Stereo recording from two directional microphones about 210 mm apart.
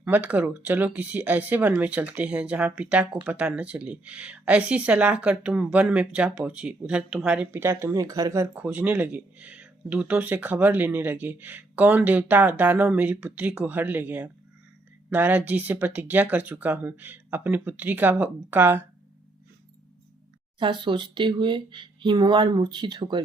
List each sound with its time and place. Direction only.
0.0 s speech: 10° right (ahead or behind)
20.6 s speech: 25° right (ahead or behind)